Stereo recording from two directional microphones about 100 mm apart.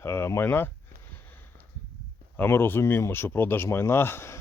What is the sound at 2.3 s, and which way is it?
Speech, 20° left (ahead or behind).